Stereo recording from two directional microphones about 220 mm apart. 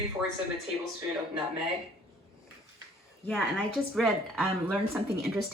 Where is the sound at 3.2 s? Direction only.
5° left (ahead or behind).